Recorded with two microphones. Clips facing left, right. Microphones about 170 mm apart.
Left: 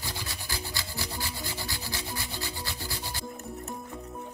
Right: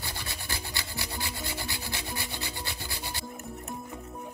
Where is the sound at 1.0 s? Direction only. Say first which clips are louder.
Even; 20° right (ahead or behind).